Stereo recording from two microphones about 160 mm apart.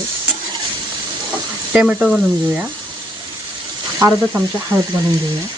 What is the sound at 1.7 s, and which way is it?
Speech, 5° right (ahead or behind).